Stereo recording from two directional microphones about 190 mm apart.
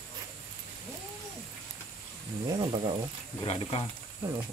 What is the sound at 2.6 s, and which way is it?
Speech, 25° right (ahead or behind).